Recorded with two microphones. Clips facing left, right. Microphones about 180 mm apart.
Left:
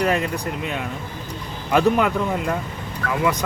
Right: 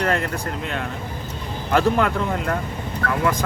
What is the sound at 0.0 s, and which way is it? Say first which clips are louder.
Speech: left 1 dB; 15° left (ahead or behind).